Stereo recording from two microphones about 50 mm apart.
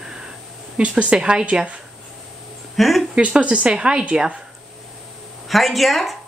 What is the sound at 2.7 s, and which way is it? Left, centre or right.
Speech, centre.